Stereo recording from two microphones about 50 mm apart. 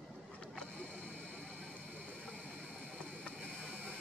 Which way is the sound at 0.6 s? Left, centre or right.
Left.